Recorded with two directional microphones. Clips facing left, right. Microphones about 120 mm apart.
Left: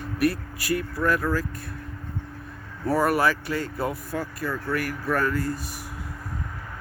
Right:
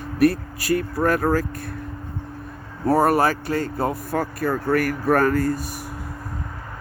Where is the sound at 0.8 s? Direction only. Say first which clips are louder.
Right 3 dB; 50° right (ahead or behind).